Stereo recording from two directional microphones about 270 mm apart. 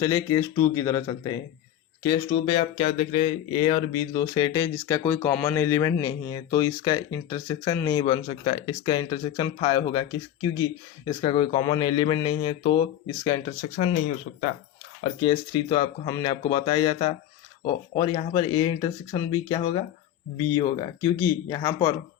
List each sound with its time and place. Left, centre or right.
0.0 s speech: centre
11.0 s speech: centre
15.0 s speech: centre